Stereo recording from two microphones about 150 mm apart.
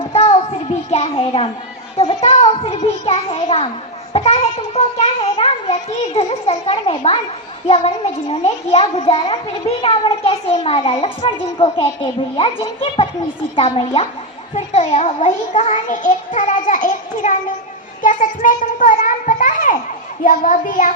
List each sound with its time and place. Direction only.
0.1 s a sound: 45° left (ahead or behind)
2.0 s a child's voice: 40° left (ahead or behind)
13.7 s a child's voice: 45° left (ahead or behind); by 20.9 s 60° left (ahead or behind)